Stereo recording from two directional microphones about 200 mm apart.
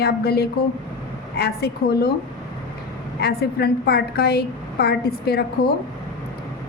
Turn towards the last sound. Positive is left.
turn(degrees=50)  # may be behind; listen again after turning